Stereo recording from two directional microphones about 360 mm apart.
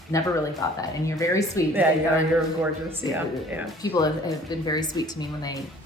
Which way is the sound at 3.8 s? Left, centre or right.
Centre.